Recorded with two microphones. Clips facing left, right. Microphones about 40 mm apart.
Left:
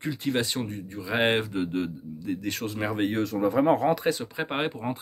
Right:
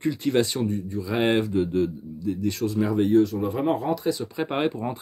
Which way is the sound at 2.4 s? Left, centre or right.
Left.